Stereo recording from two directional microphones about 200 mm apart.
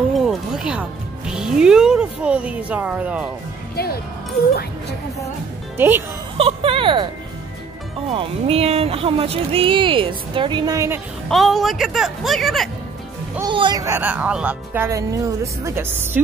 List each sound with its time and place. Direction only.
0.1 s music: centre (ahead or behind)
3.7 s speech: 50° left (ahead or behind)
5.8 s speech: 10° right (ahead or behind)
6.3 s speech: 30° right (ahead or behind)
8.1 s speech: 30° right (ahead or behind)
11.2 s speech: centre (ahead or behind)
13.4 s speech: 25° right (ahead or behind)